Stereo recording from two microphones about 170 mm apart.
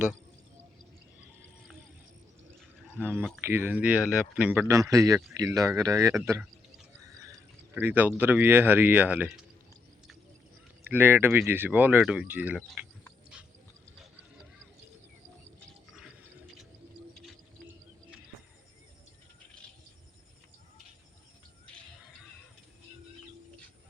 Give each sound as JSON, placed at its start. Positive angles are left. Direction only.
{"t": 3.0, "sound": "speech", "side_deg": -10}
{"t": 4.7, "sound": "speech", "side_deg": -20}
{"t": 7.1, "sound": "a sound", "side_deg": -15}
{"t": 7.8, "sound": "speech", "side_deg": -10}
{"t": 10.8, "sound": "speech", "side_deg": -10}